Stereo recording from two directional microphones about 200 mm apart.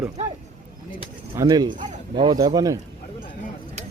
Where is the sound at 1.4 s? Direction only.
20° right (ahead or behind).